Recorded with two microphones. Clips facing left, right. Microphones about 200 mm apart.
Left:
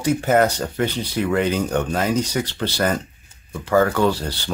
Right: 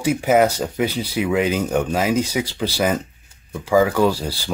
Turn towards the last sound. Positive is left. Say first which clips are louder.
# right 1 dB
turn(degrees=-10)  # may be behind; listen again after turning